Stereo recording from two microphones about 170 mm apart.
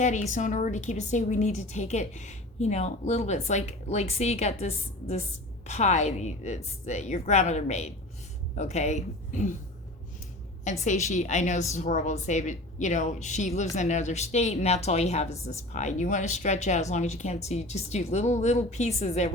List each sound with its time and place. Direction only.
0.0 s a woman's voice: 45° left (ahead or behind)
10.6 s a woman's voice: 45° left (ahead or behind)